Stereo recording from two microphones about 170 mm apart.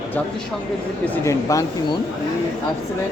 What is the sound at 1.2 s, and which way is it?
Speech, 20° left (ahead or behind).